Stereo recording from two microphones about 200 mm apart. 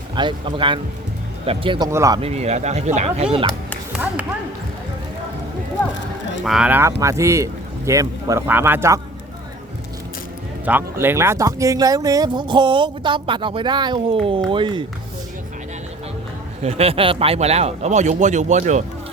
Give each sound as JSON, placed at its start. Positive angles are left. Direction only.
{"t": 0.2, "sound": "a man's voice", "side_deg": -25}
{"t": 2.2, "sound": "speech", "side_deg": -35}
{"t": 3.9, "sound": "a man's voice", "side_deg": -5}
{"t": 6.4, "sound": "a man's voice", "side_deg": -5}
{"t": 10.7, "sound": "speech", "side_deg": -10}
{"t": 16.6, "sound": "speech", "side_deg": -30}